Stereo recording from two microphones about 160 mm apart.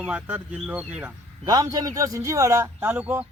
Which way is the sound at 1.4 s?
20° right (ahead or behind).